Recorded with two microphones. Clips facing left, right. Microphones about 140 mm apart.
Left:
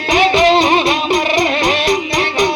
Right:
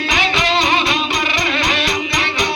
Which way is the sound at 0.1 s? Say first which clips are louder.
Left 9 dB; 45° left (ahead or behind).